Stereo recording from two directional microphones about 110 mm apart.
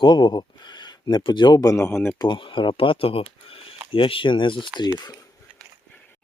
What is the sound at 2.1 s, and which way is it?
Speech, 45° left (ahead or behind).